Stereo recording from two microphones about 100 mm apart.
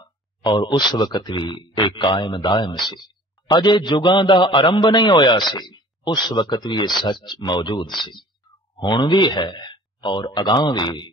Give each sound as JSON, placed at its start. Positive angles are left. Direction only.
{"t": 0.0, "sound": "a man's voice", "side_deg": 45}